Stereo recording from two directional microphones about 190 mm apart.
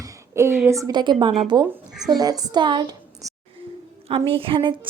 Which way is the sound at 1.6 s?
Centre (ahead or behind).